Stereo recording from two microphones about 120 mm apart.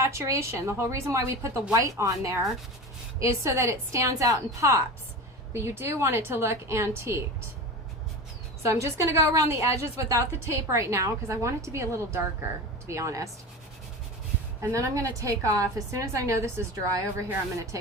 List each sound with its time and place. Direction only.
0.0 s a woman's voice: 25° right (ahead or behind)
8.6 s a woman's voice: 25° right (ahead or behind)
14.7 s a woman's voice: 25° right (ahead or behind)